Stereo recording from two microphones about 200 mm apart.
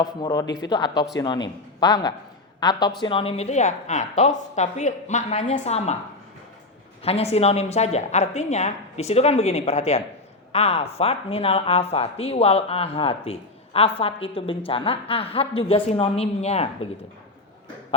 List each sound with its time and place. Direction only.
0.0 s a woman's voice: 20° left (ahead or behind)
0.4 s speech: 55° left (ahead or behind)
0.7 s a woman's voice: 20° left (ahead or behind)
7.0 s a woman's voice: 30° left (ahead or behind)